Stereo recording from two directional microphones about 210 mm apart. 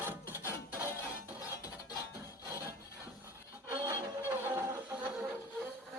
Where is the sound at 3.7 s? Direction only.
10° right (ahead or behind).